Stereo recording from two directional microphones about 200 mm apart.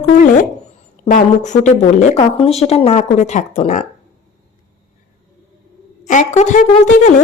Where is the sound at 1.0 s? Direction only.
35° left (ahead or behind).